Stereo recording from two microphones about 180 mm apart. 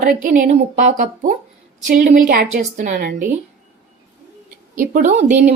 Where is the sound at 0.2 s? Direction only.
50° right (ahead or behind).